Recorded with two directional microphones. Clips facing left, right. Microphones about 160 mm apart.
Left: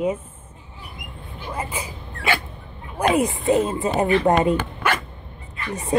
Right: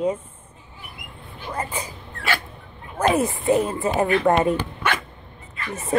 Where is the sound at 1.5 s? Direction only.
10° left (ahead or behind).